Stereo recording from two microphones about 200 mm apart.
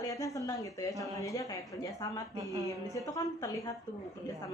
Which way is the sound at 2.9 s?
15° left (ahead or behind).